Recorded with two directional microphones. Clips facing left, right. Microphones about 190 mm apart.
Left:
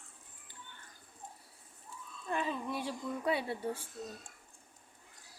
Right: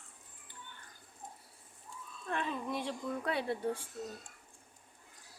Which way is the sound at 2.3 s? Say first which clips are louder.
Left 1 dB; 5° left (ahead or behind).